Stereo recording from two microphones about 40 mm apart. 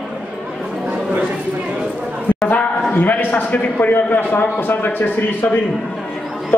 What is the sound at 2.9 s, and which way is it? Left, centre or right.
A man's voice, left.